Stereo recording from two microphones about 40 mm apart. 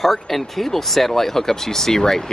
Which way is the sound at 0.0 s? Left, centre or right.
Centre.